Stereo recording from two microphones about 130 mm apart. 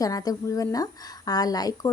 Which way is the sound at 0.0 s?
30° left (ahead or behind).